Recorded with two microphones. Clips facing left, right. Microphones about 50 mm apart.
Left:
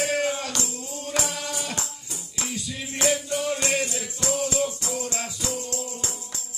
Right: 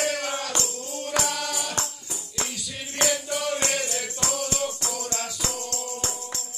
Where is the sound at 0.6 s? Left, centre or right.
Right.